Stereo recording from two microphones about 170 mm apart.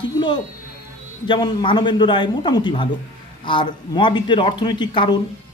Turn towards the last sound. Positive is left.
turn(degrees=25)  # may be behind; listen again after turning